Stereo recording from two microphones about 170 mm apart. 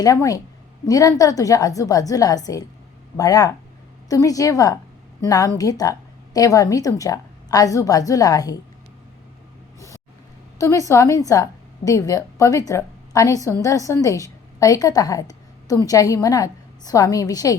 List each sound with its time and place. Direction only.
0.0 s a woman's voice: 20° left (ahead or behind)
10.6 s a woman's voice: 15° left (ahead or behind)